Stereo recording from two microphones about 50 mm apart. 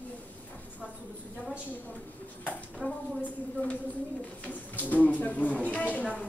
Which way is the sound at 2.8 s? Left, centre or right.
Right.